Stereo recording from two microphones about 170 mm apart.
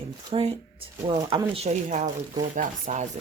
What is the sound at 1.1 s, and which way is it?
Speech, 25° right (ahead or behind).